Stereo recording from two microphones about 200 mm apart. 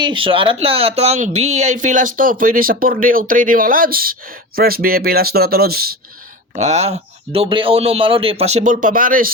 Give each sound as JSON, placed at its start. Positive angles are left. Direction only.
{"t": 0.0, "sound": "speech", "side_deg": -25}
{"t": 6.6, "sound": "speech", "side_deg": -35}